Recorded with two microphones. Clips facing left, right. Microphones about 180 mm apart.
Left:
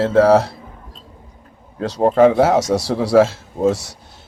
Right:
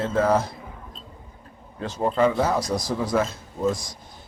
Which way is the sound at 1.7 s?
75° left (ahead or behind).